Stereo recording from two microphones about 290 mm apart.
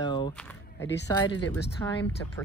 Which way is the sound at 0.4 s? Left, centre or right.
Centre.